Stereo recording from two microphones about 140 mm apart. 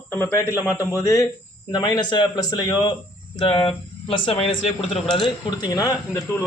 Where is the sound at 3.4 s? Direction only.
40° left (ahead or behind); by 6.4 s 20° left (ahead or behind).